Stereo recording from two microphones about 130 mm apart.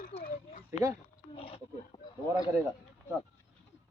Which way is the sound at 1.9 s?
30° left (ahead or behind).